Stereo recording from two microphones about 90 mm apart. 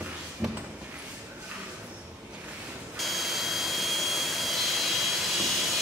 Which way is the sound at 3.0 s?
Centre (ahead or behind).